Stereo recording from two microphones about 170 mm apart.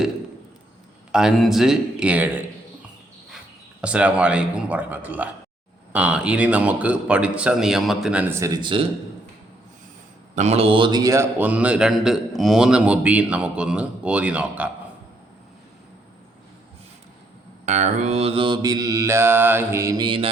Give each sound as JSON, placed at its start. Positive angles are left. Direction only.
{"t": 1.1, "sound": "speech", "side_deg": -5}
{"t": 3.8, "sound": "speech", "side_deg": -5}
{"t": 8.6, "sound": "a man's voice", "side_deg": -30}
{"t": 10.3, "sound": "speech", "side_deg": -40}
{"t": 17.7, "sound": "mantra", "side_deg": -45}